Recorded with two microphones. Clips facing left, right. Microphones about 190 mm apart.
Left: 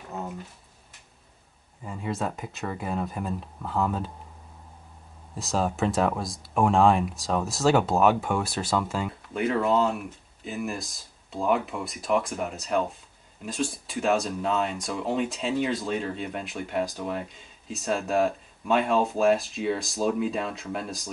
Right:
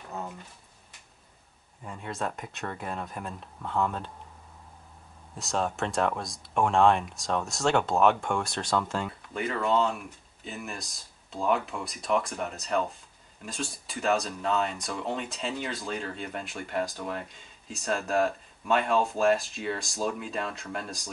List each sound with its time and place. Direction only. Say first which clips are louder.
1.9 s speech: left 4 dB; centre (ahead or behind)
5.3 s speech: left 3 dB; centre (ahead or behind)